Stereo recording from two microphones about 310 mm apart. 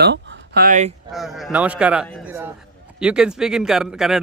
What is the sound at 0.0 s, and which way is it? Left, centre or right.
Speech, right.